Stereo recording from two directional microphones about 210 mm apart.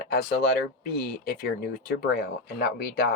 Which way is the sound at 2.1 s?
50° left (ahead or behind).